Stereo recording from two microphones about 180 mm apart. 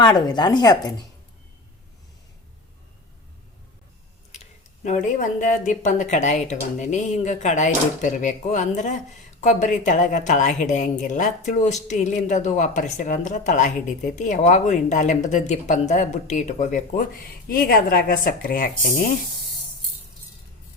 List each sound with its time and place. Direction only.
0.0 s a woman's voice: 25° left (ahead or behind)
4.3 s a sound: 40° left (ahead or behind)
5.1 s speech: 45° left (ahead or behind)